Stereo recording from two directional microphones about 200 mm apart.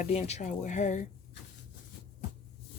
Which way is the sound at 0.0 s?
35° left (ahead or behind).